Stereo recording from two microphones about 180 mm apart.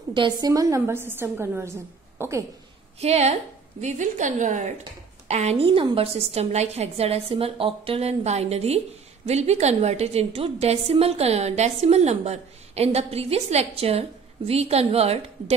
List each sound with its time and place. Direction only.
0.1 s a woman's voice: 25° right (ahead or behind)
3.0 s a woman's voice: 35° right (ahead or behind)